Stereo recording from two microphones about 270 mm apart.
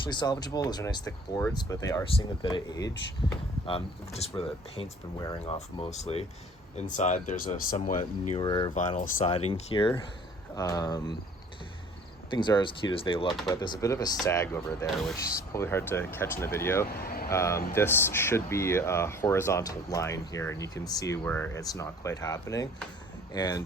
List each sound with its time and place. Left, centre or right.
0.0 s speech: centre
8.4 s speech: centre
12.3 s speech: centre
16.8 s speech: left
17.2 s speech: centre